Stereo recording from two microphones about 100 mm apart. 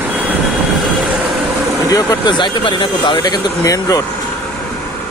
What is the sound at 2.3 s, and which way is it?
Speech, 50° left (ahead or behind).